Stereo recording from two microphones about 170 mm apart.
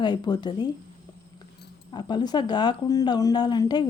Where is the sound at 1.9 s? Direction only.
25° left (ahead or behind).